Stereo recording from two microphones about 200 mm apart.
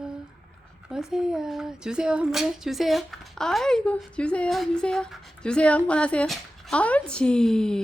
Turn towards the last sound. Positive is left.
turn(degrees=5)  # may be behind; listen again after turning